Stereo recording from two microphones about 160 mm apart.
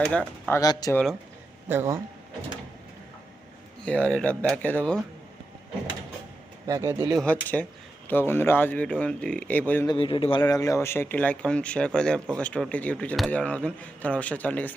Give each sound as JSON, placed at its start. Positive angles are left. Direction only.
{"t": 0.1, "sound": "speech", "side_deg": 10}
{"t": 0.6, "sound": "speech", "side_deg": 25}
{"t": 1.6, "sound": "a man's voice", "side_deg": -15}
{"t": 3.8, "sound": "speech", "side_deg": 5}
{"t": 6.7, "sound": "speech", "side_deg": -20}
{"t": 7.2, "sound": "speech", "side_deg": 10}
{"t": 9.8, "sound": "speech", "side_deg": 30}